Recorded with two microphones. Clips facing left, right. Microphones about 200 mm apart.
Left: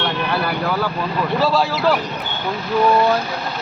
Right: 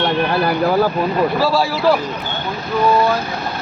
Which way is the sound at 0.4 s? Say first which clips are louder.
Right 6 dB; 40° right (ahead or behind).